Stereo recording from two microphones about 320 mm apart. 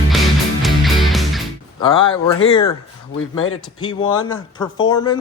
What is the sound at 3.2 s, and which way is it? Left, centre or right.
Speech, left.